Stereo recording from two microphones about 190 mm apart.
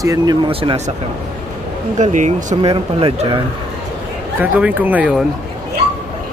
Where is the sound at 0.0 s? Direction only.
20° right (ahead or behind).